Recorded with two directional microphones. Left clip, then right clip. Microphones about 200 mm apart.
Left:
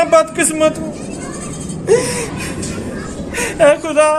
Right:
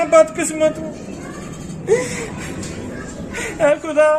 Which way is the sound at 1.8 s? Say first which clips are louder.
Left 4 dB; 5° right (ahead or behind).